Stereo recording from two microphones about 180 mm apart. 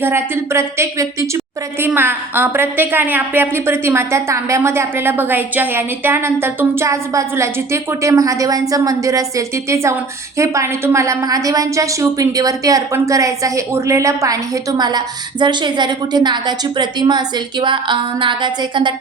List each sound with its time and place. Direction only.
0.0 s a woman's voice: 15° right (ahead or behind)